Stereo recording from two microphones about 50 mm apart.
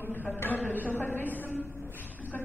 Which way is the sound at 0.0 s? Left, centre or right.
Left.